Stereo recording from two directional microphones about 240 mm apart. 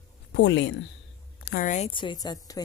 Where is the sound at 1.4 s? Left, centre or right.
Left; by 2.6 s centre.